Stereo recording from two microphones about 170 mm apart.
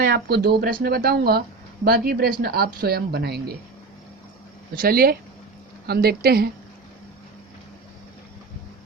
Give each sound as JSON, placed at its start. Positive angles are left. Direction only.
{"t": 0.0, "sound": "speech", "side_deg": -70}
{"t": 4.7, "sound": "speech", "side_deg": -60}